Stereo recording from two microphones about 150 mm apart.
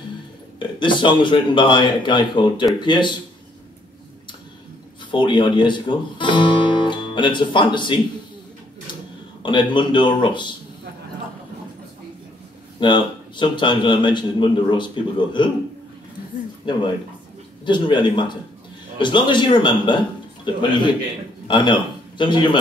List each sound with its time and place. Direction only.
0.6 s a man's voice: 30° left (ahead or behind)
5.1 s a man's voice: 30° left (ahead or behind)
9.4 s a man's voice: 30° left (ahead or behind)
12.8 s a man's voice: 30° left (ahead or behind)
17.6 s a man's voice: 30° left (ahead or behind)
21.5 s speech: 30° left (ahead or behind)